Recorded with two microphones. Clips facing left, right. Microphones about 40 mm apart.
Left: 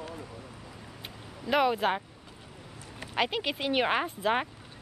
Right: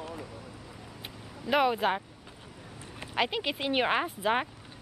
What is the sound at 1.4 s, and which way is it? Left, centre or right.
Speech, centre.